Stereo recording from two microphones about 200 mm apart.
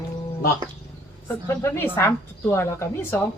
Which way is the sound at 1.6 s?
10° left (ahead or behind).